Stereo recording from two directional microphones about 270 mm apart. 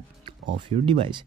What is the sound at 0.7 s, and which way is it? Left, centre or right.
Speech, centre.